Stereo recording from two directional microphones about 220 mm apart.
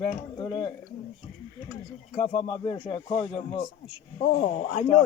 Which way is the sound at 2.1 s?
25° left (ahead or behind).